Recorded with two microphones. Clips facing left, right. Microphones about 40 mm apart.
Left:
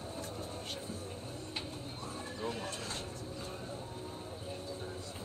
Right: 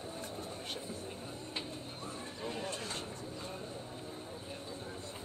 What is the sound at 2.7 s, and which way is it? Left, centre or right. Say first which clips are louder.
Vehicle: right 1 dB; right.